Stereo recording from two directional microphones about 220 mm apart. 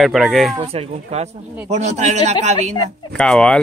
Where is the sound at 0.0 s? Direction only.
Centre (ahead or behind).